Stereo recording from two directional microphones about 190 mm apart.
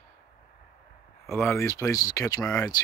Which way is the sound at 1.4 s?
15° left (ahead or behind).